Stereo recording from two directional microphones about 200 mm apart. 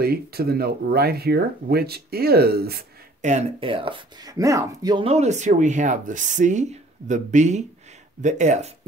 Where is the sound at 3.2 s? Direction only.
35° right (ahead or behind).